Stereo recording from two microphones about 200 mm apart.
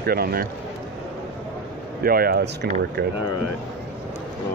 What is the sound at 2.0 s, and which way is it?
Speech, 50° right (ahead or behind).